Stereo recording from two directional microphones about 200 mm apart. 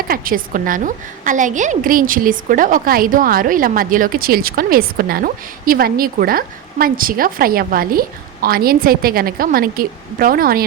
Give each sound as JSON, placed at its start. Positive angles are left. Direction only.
{"t": 0.1, "sound": "a woman's voice", "side_deg": -45}